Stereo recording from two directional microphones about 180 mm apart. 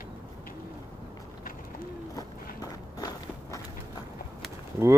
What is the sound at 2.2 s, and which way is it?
Walk, 20° left (ahead or behind).